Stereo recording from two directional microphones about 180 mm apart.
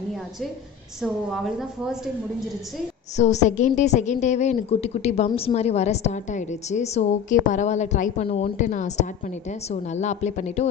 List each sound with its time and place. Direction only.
1.0 s a woman's voice: centre (ahead or behind)
3.2 s a woman's voice: 40° left (ahead or behind)